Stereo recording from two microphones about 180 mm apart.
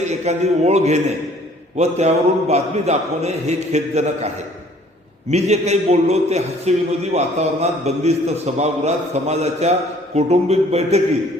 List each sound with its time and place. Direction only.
0.0 s a man's voice: 40° right (ahead or behind)
5.3 s a man's voice: 40° right (ahead or behind)